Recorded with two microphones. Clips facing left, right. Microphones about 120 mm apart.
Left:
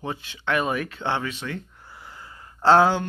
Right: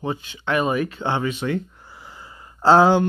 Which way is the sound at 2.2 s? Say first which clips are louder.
Right 1 dB; 15° right (ahead or behind).